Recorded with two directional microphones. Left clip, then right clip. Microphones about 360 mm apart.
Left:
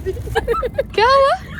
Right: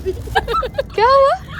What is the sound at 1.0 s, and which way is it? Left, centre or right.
Speech, left.